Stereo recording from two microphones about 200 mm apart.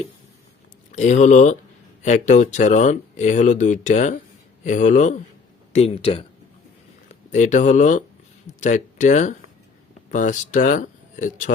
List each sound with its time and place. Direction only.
0.9 s speech: 35° left (ahead or behind)